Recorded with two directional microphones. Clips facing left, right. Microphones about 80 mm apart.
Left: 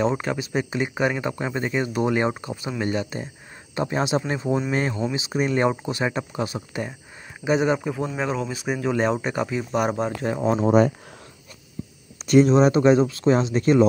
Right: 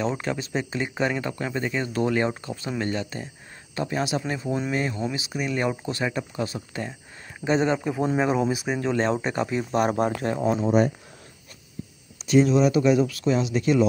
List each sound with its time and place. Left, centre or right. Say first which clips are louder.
0.0 s speech: left 3 dB; centre
7.8 s speech: right 3 dB; centre
8.6 s speech: left 1 dB; centre
10.4 s speech: left 3 dB; left
12.4 s speech: left 3 dB; left